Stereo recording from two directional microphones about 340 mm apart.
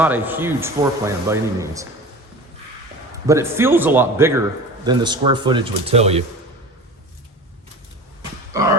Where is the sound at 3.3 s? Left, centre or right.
Centre.